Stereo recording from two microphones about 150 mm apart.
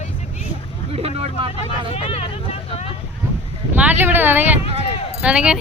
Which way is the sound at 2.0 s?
40° left (ahead or behind).